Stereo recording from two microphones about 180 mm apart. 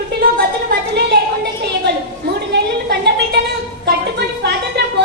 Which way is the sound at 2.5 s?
70° right (ahead or behind).